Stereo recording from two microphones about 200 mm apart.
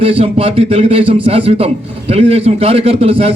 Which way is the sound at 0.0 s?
30° right (ahead or behind).